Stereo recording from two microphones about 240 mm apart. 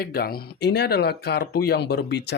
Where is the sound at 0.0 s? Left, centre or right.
Left.